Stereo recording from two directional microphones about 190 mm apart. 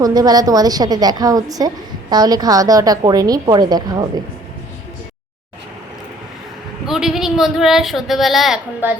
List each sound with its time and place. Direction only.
0.0 s a woman's voice: 20° right (ahead or behind)
6.8 s speech: centre (ahead or behind)